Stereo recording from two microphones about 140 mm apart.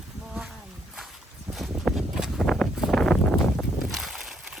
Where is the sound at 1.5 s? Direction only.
Centre (ahead or behind).